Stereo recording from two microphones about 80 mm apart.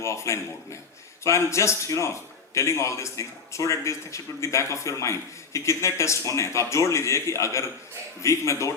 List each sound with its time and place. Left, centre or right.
0.0 s speech: left